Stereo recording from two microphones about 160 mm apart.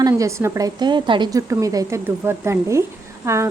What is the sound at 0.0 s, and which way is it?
A woman's voice, 20° right (ahead or behind).